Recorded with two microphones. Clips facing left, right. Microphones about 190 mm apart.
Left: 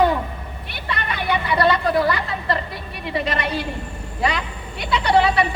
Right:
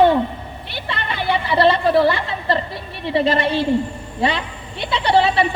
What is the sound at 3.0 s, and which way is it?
A woman's voice, 30° right (ahead or behind).